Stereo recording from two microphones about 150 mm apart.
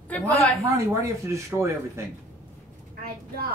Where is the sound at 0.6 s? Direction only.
20° right (ahead or behind).